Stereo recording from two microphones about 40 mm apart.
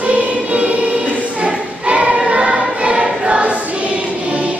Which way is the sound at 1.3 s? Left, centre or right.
Right.